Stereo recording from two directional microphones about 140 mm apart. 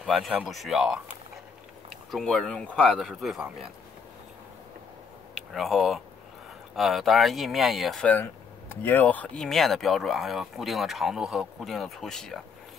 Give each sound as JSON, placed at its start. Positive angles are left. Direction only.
{"t": 0.0, "sound": "speech", "side_deg": 0}
{"t": 5.3, "sound": "speech", "side_deg": 0}